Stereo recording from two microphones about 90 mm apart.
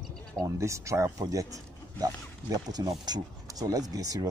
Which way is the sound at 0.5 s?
35° right (ahead or behind).